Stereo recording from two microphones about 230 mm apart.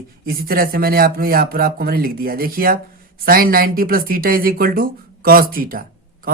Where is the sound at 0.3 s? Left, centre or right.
Right.